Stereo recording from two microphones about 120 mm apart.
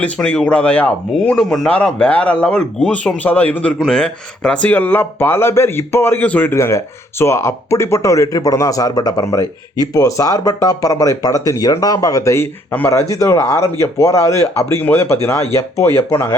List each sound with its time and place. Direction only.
0.0 s speech: 10° left (ahead or behind)